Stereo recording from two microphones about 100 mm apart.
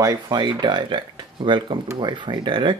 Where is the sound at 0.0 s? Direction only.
40° right (ahead or behind).